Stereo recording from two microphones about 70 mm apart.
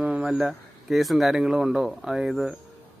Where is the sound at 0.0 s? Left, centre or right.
Centre.